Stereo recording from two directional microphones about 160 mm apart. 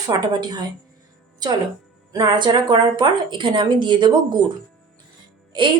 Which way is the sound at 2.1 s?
25° right (ahead or behind).